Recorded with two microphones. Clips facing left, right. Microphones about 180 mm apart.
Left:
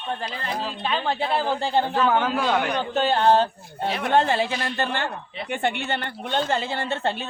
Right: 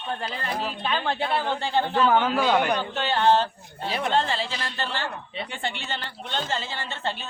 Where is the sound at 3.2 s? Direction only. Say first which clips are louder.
Right 1 dB; 50° left (ahead or behind).